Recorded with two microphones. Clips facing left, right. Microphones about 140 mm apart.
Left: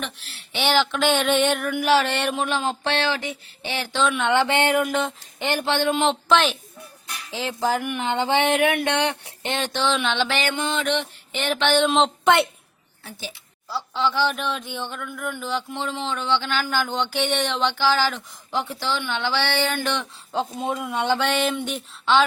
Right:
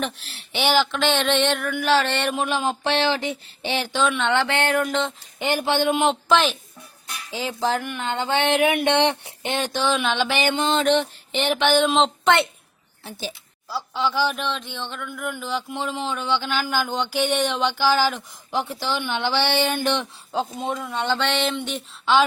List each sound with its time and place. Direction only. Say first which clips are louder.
0.7 s a sound: left 1 dB; centre (ahead or behind); by 3.8 s 25° right (ahead or behind)
4.1 s speech: left 1 dB; 10° left (ahead or behind)
5.4 s speech: right 1 dB; 10° right (ahead or behind); by 8.4 s 15° left (ahead or behind)
8.4 s a sound: right 1 dB; centre (ahead or behind)
8.7 s speech: right 3 dB; 20° right (ahead or behind)
9.4 s speech: even; 10° right (ahead or behind); by 11.1 s 35° right (ahead or behind)
11.3 s speech: right 1 dB; 20° right (ahead or behind)
11.6 s a sound: even; 5° right (ahead or behind)
13.1 s speech: right 4 dB; 30° right (ahead or behind)
13.7 s speech: left 1 dB; 10° right (ahead or behind)
20.3 s speech: even; centre (ahead or behind)